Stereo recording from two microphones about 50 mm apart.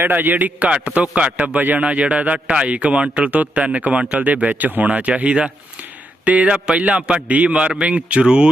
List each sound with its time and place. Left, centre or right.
0.0 s a man's voice: right
0.7 s speech: right
1.5 s speech: right